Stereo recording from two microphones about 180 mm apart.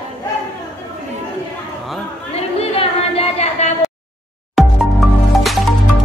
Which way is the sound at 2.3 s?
35° left (ahead or behind).